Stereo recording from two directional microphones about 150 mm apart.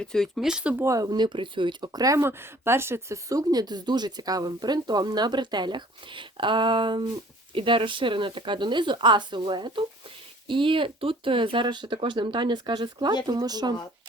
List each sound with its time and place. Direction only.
0.0 s speech: 5° left (ahead or behind)
0.9 s speech: 25° right (ahead or behind)